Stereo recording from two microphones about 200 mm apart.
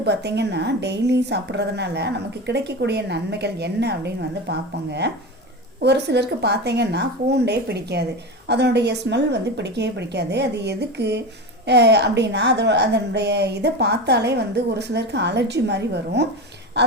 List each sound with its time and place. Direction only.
0.0 s a woman's voice: 55° right (ahead or behind)